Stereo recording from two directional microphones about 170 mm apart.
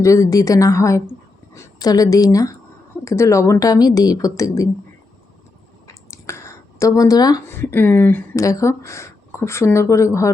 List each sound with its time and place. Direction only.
0.0 s a woman's voice: 20° left (ahead or behind)
5.9 s speech: 15° left (ahead or behind)